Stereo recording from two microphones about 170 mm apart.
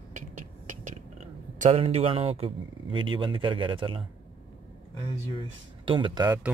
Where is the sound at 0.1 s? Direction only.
45° right (ahead or behind).